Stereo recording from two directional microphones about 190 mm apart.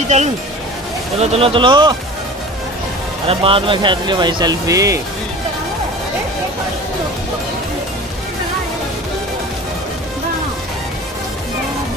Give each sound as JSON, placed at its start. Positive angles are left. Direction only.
{"t": 1.2, "sound": "speech", "side_deg": -30}
{"t": 3.3, "sound": "speech", "side_deg": -30}